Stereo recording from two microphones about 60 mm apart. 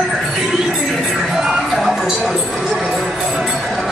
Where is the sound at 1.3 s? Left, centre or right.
Centre.